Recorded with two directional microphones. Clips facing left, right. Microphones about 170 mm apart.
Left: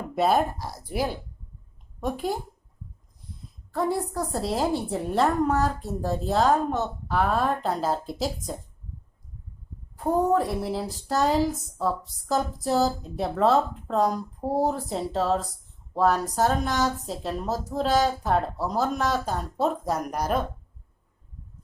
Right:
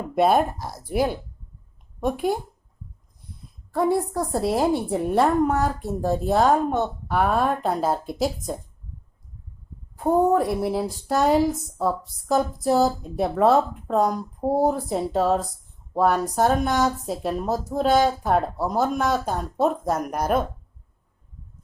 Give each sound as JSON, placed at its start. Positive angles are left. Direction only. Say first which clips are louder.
{"t": 0.2, "sound": "a woman's voice", "louder": "right 3 dB", "side_deg": -50}
{"t": 2.0, "sound": "a woman's voice", "louder": "right 5 dB", "side_deg": -55}
{"t": 3.8, "sound": "a woman's voice", "louder": "right 4 dB", "side_deg": -55}
{"t": 10.0, "sound": "a woman's voice", "louder": "right 3 dB", "side_deg": -60}